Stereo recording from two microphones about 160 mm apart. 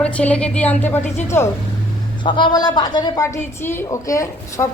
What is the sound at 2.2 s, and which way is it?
A woman's voice, 30° left (ahead or behind).